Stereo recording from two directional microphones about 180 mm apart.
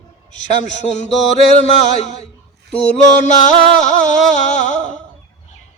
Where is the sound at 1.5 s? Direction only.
40° left (ahead or behind).